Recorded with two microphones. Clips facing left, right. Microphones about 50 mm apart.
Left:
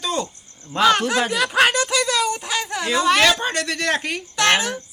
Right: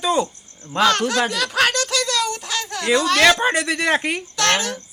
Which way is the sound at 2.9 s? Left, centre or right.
Centre.